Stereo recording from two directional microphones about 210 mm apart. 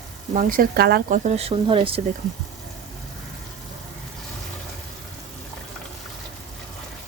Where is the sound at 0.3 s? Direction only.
40° right (ahead or behind).